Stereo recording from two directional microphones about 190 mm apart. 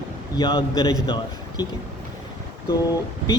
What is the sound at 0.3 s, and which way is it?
A man's voice, 20° left (ahead or behind).